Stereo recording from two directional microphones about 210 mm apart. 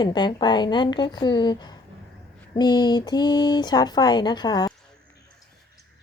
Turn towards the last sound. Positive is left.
turn(degrees=20)  # may be behind; listen again after turning